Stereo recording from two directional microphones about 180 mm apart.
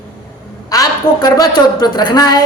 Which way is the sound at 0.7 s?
20° left (ahead or behind).